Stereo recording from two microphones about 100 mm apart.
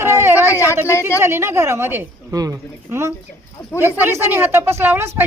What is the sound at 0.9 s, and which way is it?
Speech, 30° left (ahead or behind).